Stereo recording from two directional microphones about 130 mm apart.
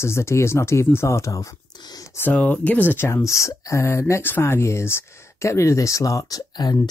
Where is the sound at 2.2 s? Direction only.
10° left (ahead or behind).